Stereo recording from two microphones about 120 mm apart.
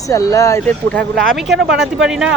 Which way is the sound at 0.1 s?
30° left (ahead or behind).